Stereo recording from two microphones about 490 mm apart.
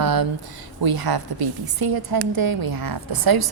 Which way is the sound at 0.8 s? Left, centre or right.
Right.